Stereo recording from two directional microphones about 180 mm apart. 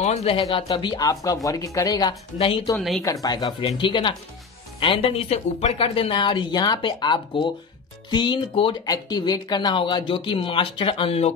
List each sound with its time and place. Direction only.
0.0 s speech: 35° left (ahead or behind)
3.0 s speech: 20° left (ahead or behind); by 11.3 s 35° left (ahead or behind)